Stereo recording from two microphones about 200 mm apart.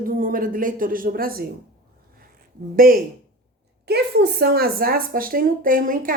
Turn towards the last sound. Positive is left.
turn(degrees=-45)  # may be behind; listen again after turning